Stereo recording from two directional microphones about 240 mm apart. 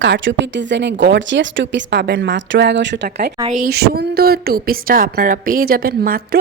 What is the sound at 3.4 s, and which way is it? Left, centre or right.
A woman's voice, right.